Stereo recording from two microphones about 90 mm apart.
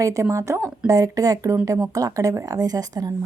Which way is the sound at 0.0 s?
35° right (ahead or behind).